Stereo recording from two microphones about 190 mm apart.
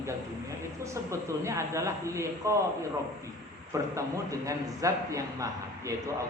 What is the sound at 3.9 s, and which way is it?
A man's voice, 15° right (ahead or behind).